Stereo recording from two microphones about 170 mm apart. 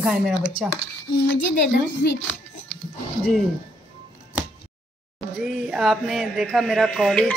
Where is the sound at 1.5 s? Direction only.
85° left.